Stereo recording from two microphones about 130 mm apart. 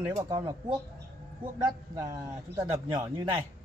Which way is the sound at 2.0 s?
25° right (ahead or behind).